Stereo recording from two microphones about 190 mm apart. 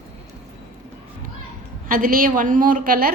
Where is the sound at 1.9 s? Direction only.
45° right (ahead or behind).